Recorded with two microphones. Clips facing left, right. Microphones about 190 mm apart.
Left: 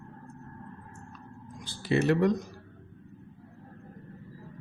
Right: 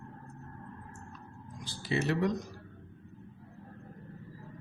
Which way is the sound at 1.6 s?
55° left (ahead or behind).